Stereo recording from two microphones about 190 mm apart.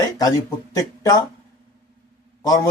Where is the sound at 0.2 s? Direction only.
20° left (ahead or behind).